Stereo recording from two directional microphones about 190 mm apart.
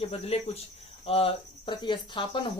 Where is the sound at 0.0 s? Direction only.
30° left (ahead or behind).